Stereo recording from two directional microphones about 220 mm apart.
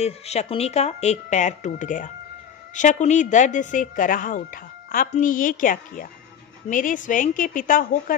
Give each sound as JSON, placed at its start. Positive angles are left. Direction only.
{"t": 0.0, "sound": "speech", "side_deg": 30}